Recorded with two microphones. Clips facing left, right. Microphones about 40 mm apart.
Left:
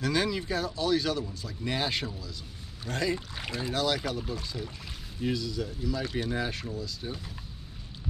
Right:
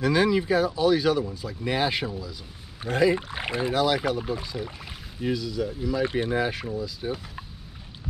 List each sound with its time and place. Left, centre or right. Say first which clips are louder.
0.0 s speech: right 7 dB; centre
3.2 s speech: right 7 dB; right
3.7 s speech: right 5 dB; centre
5.2 s speech: right 4 dB; centre
6.0 s speech: right 6 dB; right
6.3 s speech: right 6 dB; centre